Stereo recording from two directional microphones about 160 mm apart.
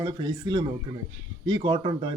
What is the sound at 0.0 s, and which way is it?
Speech, 30° right (ahead or behind).